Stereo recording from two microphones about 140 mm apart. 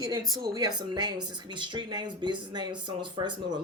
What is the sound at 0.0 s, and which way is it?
Speech, 30° right (ahead or behind).